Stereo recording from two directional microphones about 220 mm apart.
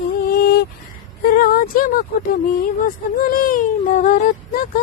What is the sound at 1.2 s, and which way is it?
Speech, 40° left (ahead or behind).